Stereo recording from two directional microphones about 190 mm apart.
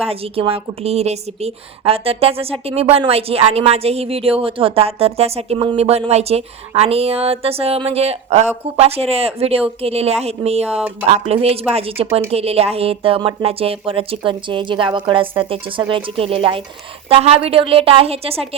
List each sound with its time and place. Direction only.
0.0 s a woman's voice: 30° right (ahead or behind)